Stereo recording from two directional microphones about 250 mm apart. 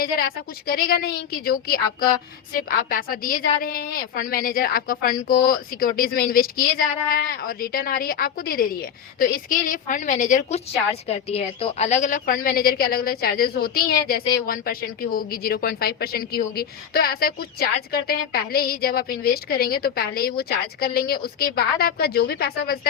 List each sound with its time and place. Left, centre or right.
0.0 s speech: left